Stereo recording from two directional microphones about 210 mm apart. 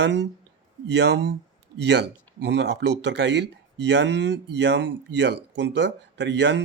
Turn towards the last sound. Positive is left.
turn(degrees=-55)  # may be behind; listen again after turning